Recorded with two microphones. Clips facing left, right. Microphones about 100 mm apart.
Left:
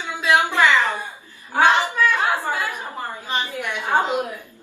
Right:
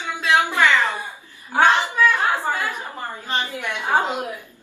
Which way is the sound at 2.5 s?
20° left (ahead or behind).